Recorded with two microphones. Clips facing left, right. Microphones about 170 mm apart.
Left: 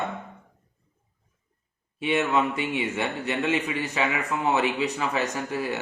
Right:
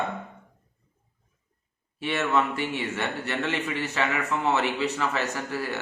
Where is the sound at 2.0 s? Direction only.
15° left (ahead or behind).